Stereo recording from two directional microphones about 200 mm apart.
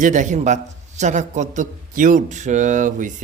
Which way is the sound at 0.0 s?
40° right (ahead or behind).